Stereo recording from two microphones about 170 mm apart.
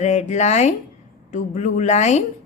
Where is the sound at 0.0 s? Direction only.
40° left (ahead or behind).